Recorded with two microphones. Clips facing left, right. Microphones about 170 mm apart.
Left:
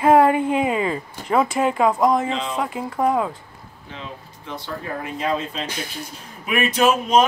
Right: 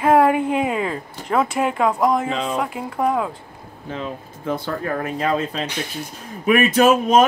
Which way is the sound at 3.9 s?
40° right (ahead or behind).